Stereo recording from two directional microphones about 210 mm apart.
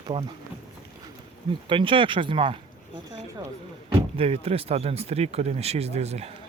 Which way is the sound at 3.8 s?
30° right (ahead or behind).